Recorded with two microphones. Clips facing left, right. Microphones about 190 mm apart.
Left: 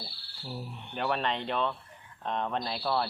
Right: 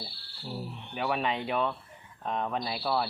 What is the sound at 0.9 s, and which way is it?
Speech, 5° right (ahead or behind).